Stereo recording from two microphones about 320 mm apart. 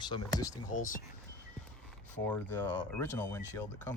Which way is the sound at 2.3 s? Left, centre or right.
Centre.